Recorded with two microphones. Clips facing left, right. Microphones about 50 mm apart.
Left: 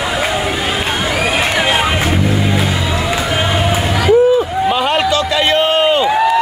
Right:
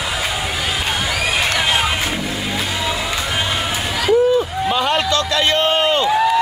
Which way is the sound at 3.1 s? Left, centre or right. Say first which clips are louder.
Left 5 dB; centre.